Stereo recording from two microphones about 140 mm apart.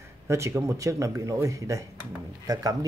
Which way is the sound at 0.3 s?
20° right (ahead or behind).